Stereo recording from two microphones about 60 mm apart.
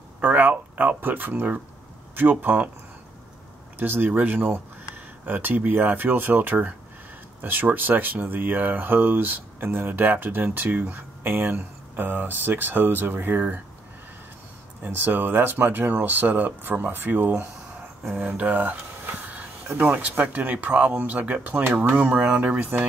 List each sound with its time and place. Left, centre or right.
0.2 s speech: right
3.8 s speech: right
14.8 s speech: right
18.1 s speech: right